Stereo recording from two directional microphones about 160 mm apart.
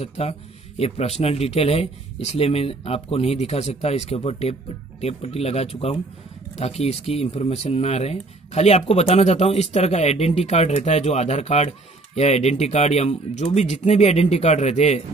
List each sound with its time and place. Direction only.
0.0 s speech: 40° left (ahead or behind)